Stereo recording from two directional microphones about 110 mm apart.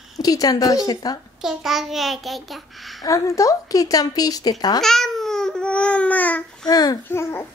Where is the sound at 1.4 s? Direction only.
Centre (ahead or behind).